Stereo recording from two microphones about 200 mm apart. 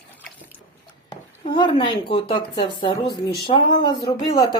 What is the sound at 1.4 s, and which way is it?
Speech, 25° left (ahead or behind).